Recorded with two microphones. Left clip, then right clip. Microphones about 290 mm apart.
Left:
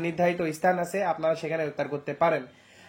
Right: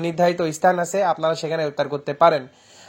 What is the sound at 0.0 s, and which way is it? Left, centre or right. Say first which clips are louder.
Speech: right 6 dB; right.